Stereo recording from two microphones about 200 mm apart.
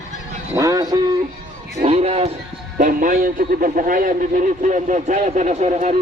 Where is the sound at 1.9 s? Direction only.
30° right (ahead or behind).